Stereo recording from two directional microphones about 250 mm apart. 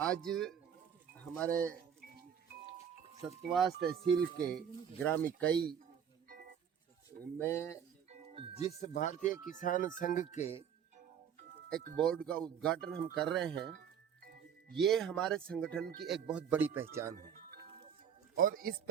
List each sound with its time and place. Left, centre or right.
0.0 s speech: centre
3.4 s speech: centre
6.2 s music: right
7.3 s speech: centre
8.1 s music: right
8.5 s speech: left
11.9 s speech: centre
14.7 s speech: centre
17.2 s music: right
18.3 s speech: right